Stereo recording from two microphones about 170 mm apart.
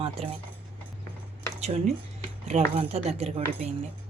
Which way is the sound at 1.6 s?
40° right (ahead or behind).